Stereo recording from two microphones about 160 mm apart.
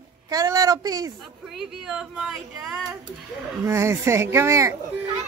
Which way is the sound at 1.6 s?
5° right (ahead or behind).